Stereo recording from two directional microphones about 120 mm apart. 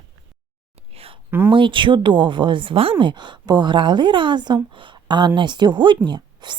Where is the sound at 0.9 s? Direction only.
55° right (ahead or behind).